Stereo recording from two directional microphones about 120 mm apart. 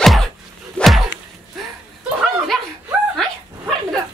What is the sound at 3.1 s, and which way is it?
Dog, centre (ahead or behind).